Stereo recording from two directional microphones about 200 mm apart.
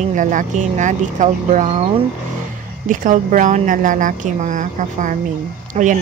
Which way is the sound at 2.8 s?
40° right (ahead or behind).